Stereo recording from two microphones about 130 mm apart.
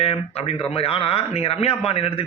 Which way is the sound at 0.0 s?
50° left (ahead or behind).